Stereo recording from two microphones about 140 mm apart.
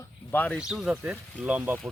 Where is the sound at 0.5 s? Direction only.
5° right (ahead or behind).